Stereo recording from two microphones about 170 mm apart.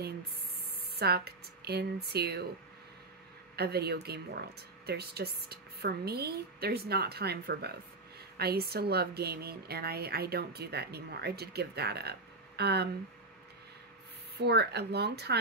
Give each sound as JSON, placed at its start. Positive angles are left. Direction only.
{"t": 0.9, "sound": "speech", "side_deg": -70}
{"t": 3.5, "sound": "speech", "side_deg": -70}
{"t": 14.3, "sound": "speech", "side_deg": -75}